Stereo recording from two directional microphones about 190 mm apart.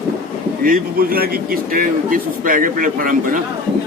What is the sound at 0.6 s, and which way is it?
A man's voice, 50° right (ahead or behind).